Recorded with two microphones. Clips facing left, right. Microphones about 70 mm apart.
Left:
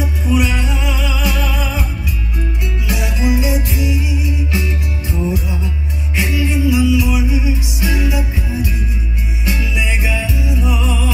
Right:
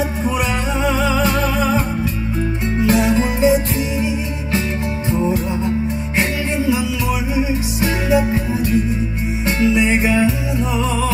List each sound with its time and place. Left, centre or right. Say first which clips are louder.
0.3 s music: left 2 dB; right
2.8 s music: right 7 dB; right
6.1 s music: left 1 dB; right